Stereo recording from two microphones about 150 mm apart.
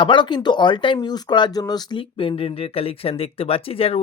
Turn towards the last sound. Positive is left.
turn(degrees=40)  # may be behind; listen again after turning